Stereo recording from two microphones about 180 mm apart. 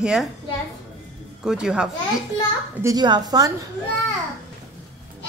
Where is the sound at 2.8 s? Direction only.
20° right (ahead or behind).